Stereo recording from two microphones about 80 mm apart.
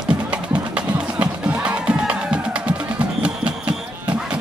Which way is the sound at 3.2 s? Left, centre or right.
Centre.